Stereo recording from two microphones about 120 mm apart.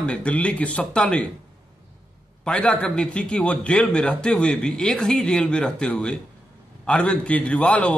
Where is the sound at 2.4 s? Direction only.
10° left (ahead or behind).